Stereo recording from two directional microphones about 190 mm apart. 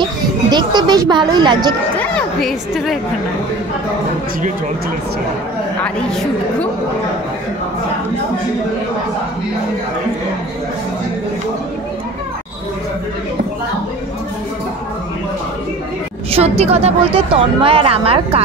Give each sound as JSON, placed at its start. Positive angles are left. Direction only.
{"t": 0.5, "sound": "speech", "side_deg": -25}
{"t": 2.0, "sound": "a sound", "side_deg": 5}
{"t": 16.3, "sound": "a woman's voice", "side_deg": -30}